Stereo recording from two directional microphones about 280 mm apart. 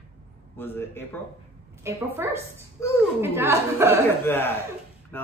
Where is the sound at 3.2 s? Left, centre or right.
Centre.